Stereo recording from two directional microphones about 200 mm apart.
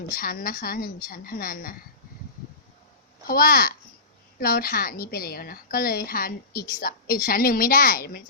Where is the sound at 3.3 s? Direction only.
45° left (ahead or behind).